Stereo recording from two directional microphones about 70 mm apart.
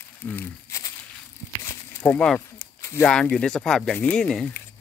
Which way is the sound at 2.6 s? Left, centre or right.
Left.